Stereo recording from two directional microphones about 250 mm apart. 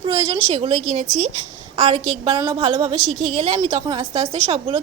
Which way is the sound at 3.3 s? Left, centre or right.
Right.